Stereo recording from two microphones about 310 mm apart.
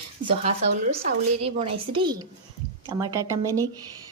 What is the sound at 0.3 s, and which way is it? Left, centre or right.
Speech, right.